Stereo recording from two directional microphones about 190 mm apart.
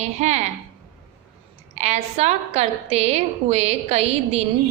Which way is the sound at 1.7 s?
35° right (ahead or behind).